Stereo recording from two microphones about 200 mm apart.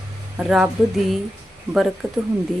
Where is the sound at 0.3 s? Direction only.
5° right (ahead or behind).